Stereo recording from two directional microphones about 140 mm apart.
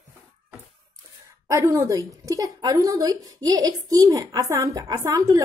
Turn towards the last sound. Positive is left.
turn(degrees=-25)  # may be behind; listen again after turning